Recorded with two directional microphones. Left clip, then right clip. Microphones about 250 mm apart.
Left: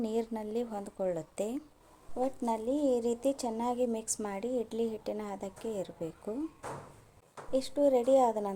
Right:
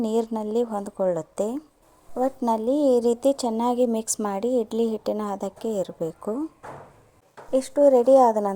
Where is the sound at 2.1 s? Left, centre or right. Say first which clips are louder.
Right 9 dB; right.